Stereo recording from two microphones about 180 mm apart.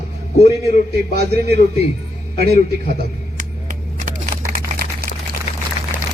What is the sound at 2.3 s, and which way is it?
Speech, 60° right (ahead or behind).